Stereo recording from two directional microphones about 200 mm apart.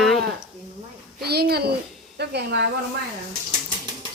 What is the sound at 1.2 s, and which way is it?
A child's voice, 50° right (ahead or behind).